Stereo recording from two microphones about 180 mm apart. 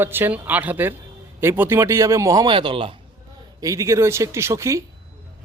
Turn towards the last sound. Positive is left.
turn(degrees=-15)  # may be behind; listen again after turning